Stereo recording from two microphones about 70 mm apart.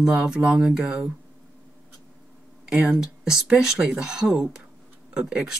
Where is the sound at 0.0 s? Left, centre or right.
Centre.